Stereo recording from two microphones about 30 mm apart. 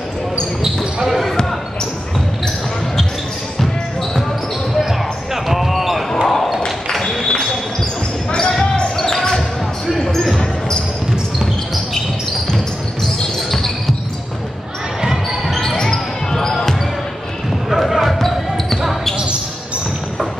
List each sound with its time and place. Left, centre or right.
1.0 s a sound: centre
3.5 s basketball bounce: centre
4.7 s basketball bounce: centre
6.2 s basketball bounce: centre
7.2 s basketball bounce: left
8.9 s basketball bounce: centre
9.8 s basketball bounce: centre
13.5 s basketball bounce: centre
15.7 s basketball bounce: left
16.3 s basketball bounce: centre
17.6 s basketball bounce: centre